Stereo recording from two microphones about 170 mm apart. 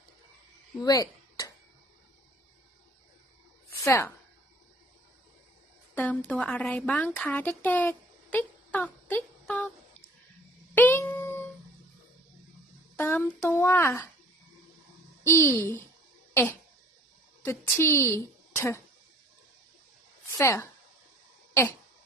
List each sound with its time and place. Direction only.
0.8 s a sound: 20° left (ahead or behind)
3.8 s speech: 15° left (ahead or behind)
5.9 s speech: 10° left (ahead or behind)
10.8 s a sound: 10° left (ahead or behind)
13.0 s speech: 10° left (ahead or behind)
15.2 s speech: 15° left (ahead or behind)
16.3 s cough: 15° left (ahead or behind)
17.4 s a woman's voice: 15° left (ahead or behind)
20.3 s a woman's voice: 15° left (ahead or behind)
21.5 s cough: 15° left (ahead or behind)